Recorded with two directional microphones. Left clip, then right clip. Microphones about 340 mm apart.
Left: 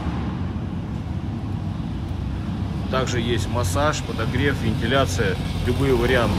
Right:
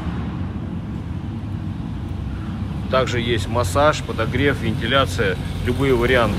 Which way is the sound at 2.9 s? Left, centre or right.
Centre.